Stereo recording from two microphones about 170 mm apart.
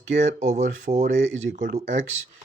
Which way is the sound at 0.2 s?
45° right (ahead or behind).